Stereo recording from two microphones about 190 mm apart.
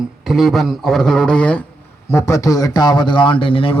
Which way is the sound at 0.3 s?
Centre (ahead or behind).